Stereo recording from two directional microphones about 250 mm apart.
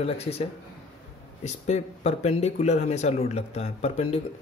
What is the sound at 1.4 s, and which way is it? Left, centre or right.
Speech, left.